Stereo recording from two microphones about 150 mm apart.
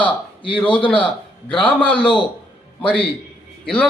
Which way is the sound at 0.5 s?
10° left (ahead or behind).